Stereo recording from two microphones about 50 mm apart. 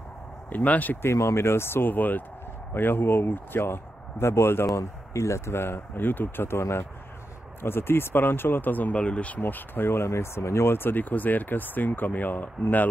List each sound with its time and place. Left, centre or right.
0.5 s speech: left
1.0 s speech: left
4.7 s speech: left
9.0 s speech: left
9.4 s speech: left